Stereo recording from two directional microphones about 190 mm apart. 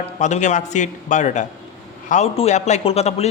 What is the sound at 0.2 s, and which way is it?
A man's voice, 40° left (ahead or behind).